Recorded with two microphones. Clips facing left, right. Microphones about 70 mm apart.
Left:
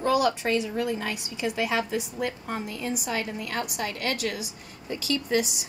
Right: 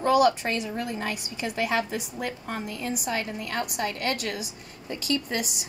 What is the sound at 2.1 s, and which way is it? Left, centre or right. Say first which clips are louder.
A woman's voice: left 2 dB; centre.